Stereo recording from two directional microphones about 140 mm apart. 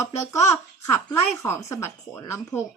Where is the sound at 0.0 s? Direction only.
20° left (ahead or behind).